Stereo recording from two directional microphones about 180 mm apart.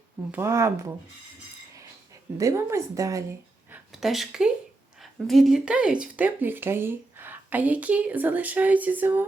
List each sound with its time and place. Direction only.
0.3 s speech: 15° right (ahead or behind)
2.4 s speech: 15° right (ahead or behind)
3.7 s speech: centre (ahead or behind)